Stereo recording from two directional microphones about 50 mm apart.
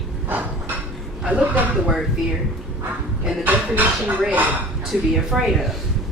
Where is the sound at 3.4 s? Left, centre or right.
Right.